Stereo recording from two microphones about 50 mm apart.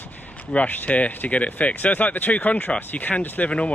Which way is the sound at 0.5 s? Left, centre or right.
Left.